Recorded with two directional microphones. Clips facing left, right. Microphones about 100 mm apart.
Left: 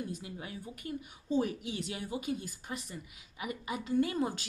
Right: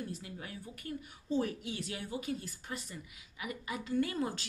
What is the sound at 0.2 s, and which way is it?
Speech, 20° left (ahead or behind).